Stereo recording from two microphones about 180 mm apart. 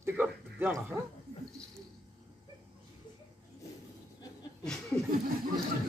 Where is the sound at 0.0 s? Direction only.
10° right (ahead or behind).